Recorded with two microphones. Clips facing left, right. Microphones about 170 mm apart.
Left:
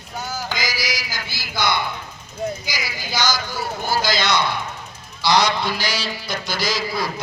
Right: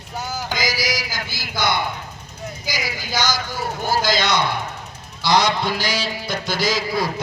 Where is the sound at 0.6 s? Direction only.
45° right (ahead or behind).